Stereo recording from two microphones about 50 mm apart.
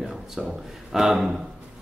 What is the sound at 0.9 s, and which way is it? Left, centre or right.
Speech, centre.